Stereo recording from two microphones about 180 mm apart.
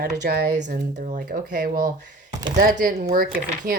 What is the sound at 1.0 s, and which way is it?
Speech, 50° right (ahead or behind).